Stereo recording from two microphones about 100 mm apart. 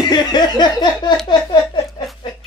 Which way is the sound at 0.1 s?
45° left (ahead or behind).